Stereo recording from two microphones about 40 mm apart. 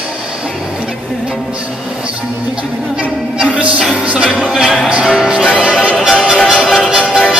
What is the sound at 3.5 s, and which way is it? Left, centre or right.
Music, right.